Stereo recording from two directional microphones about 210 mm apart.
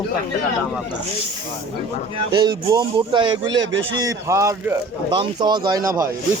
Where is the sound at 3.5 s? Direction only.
65° right (ahead or behind).